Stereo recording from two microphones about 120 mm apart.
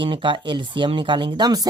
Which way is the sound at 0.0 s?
45° right (ahead or behind).